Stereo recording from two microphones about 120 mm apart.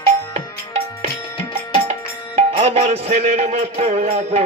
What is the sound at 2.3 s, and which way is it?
Music, 60° right (ahead or behind).